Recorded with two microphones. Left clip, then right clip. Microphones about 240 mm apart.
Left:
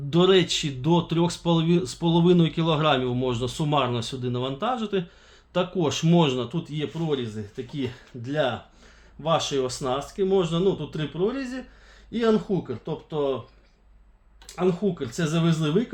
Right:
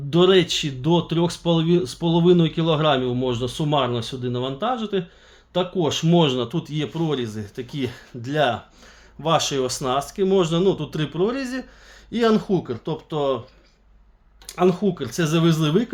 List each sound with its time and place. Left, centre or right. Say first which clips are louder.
0.1 s speech: right 3 dB; centre; by 13.3 s right
14.4 s speech: right 5 dB; right